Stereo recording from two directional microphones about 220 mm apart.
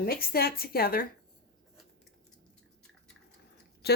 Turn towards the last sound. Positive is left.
turn(degrees=45)  # may be behind; listen again after turning